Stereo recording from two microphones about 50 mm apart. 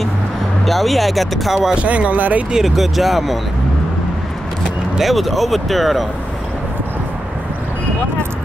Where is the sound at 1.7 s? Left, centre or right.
Right.